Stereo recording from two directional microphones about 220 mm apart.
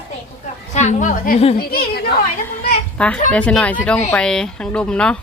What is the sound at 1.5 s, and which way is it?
Speech, 45° left (ahead or behind).